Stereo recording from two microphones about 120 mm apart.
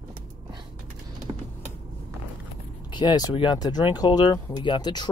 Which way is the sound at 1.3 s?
40° right (ahead or behind).